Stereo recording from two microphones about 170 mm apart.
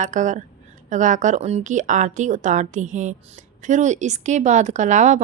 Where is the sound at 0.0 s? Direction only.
45° right (ahead or behind).